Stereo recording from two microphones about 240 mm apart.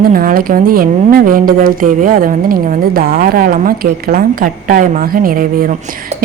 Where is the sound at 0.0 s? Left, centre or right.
Right.